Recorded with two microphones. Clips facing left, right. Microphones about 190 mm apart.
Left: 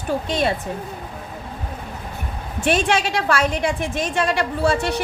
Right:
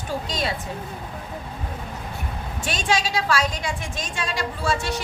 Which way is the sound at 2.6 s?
60° left (ahead or behind).